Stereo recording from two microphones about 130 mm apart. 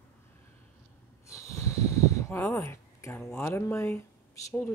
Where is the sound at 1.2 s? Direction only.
25° left (ahead or behind).